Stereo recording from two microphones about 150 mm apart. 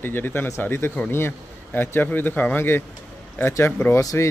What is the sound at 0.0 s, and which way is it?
Speech, 15° left (ahead or behind).